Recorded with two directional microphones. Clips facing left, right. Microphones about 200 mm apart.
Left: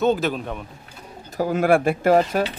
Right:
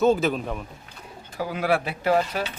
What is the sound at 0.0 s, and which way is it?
Speech, centre (ahead or behind).